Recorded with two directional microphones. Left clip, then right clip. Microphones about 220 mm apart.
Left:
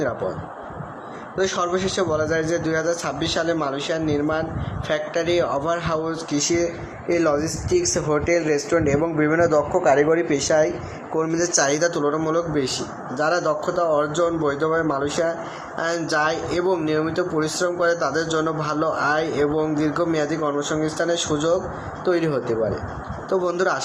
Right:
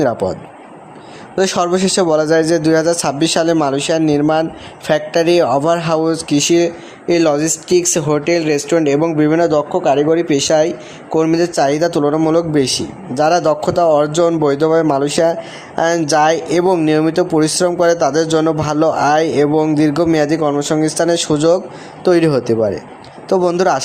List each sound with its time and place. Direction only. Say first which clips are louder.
1.5 s speech: right 9 dB; 60° right (ahead or behind)
7.9 s speech: right 5 dB; 60° right (ahead or behind)
9.6 s a man's voice: right 4 dB; 35° right (ahead or behind)
9.9 s a man's voice: right 6 dB; 55° right (ahead or behind)